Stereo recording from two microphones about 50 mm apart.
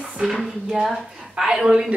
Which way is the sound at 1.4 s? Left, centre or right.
Centre.